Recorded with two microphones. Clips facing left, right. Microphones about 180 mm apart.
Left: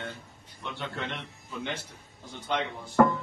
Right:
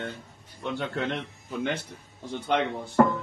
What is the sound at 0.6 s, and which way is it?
Speech, 45° right (ahead or behind).